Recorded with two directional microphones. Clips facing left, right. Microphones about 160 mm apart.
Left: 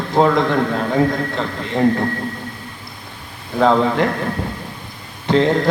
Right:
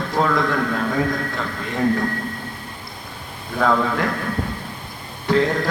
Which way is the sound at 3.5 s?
25° left (ahead or behind).